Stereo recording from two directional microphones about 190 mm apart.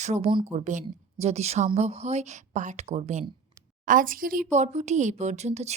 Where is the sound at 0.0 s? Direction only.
35° right (ahead or behind).